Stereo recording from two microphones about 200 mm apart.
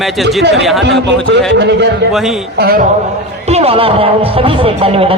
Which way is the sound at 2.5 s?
50° right (ahead or behind).